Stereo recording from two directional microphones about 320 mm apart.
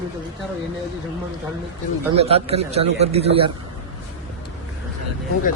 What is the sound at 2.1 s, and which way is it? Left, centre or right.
A man's voice, centre.